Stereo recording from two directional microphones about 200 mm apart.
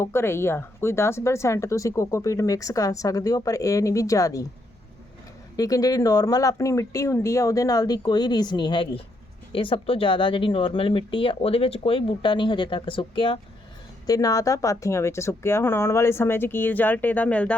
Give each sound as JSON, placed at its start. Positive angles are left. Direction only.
{"t": 0.0, "sound": "speech", "side_deg": 10}
{"t": 5.5, "sound": "speech", "side_deg": 20}